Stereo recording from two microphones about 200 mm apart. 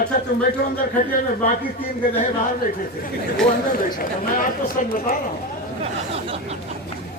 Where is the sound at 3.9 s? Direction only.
45° left (ahead or behind).